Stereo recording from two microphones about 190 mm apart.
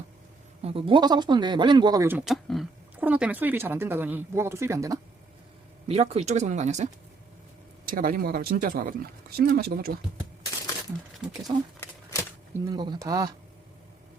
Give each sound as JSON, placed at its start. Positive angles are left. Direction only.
{"t": 0.6, "sound": "speech", "side_deg": -30}
{"t": 5.9, "sound": "speech", "side_deg": -35}
{"t": 7.9, "sound": "speech", "side_deg": -50}
{"t": 11.5, "sound": "speech", "side_deg": -30}
{"t": 12.7, "sound": "speech", "side_deg": -20}